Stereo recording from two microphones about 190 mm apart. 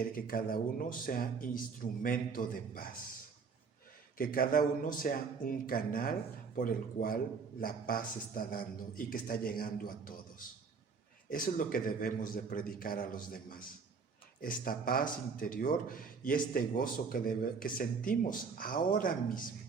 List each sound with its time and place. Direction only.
0.0 s speech: 50° left (ahead or behind)
4.2 s speech: 50° left (ahead or behind)